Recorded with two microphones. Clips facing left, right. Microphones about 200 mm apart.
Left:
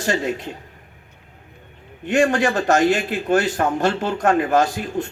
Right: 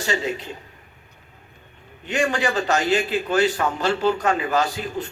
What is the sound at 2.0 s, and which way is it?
A man's voice, 50° left (ahead or behind).